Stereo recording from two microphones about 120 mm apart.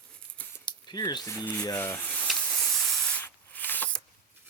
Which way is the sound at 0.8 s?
35° left (ahead or behind).